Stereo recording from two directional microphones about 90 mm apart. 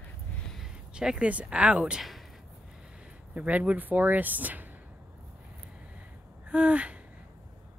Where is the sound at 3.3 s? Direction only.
15° right (ahead or behind).